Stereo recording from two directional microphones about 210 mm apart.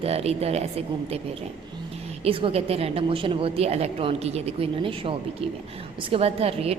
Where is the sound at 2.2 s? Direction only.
25° right (ahead or behind).